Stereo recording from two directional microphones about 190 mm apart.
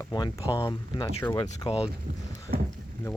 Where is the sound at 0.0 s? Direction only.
20° left (ahead or behind).